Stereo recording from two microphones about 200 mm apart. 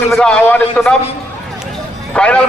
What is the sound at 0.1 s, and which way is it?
Speech, 5° left (ahead or behind).